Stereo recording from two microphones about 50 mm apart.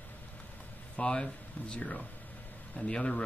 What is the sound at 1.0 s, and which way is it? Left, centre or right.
Speech, left.